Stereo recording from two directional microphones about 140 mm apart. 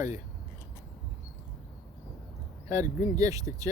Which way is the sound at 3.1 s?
25° right (ahead or behind).